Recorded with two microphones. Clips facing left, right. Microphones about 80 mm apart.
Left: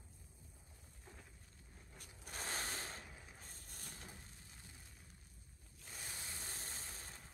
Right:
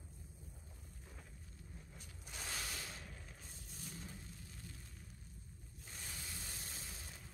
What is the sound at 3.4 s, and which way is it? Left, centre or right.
Vehicle, left.